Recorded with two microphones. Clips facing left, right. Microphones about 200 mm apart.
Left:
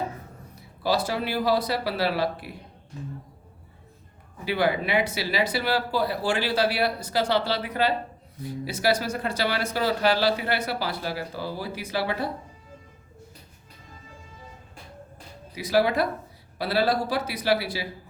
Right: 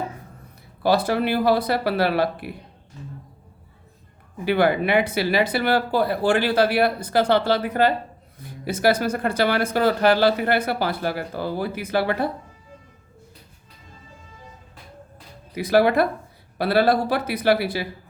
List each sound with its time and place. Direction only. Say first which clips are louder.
0.8 s speech: right 5 dB; 55° right (ahead or behind)
4.4 s speech: right 5 dB; 55° right (ahead or behind)
15.5 s speech: right 5 dB; 55° right (ahead or behind)